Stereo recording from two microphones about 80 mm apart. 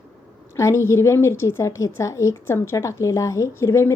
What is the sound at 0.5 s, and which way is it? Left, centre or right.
Speech, left.